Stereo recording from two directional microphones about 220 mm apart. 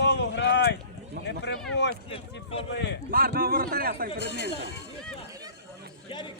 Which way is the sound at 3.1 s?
40° right (ahead or behind).